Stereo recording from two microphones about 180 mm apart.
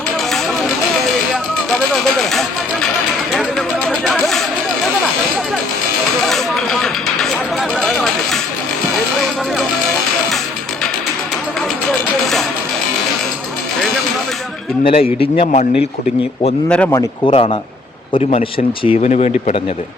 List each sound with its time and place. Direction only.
0.3 s music: centre (ahead or behind)
1.9 s speech: centre (ahead or behind)
3.3 s a sound: centre (ahead or behind)
6.2 s a sound: centre (ahead or behind)
11.9 s music: centre (ahead or behind)
14.8 s speech: 30° left (ahead or behind)
16.6 s speech: 5° left (ahead or behind)
17.2 s speech: 25° left (ahead or behind)